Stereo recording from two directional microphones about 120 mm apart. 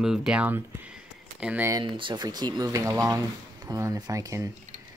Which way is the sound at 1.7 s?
35° right (ahead or behind).